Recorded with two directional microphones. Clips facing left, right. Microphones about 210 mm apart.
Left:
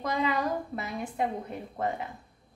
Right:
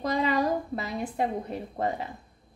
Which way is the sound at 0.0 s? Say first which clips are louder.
Right 3 dB; 35° right (ahead or behind).